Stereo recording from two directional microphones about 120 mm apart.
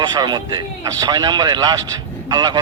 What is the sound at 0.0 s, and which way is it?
A man's voice, 35° right (ahead or behind).